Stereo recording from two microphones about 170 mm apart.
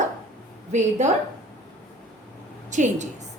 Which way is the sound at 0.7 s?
45° right (ahead or behind).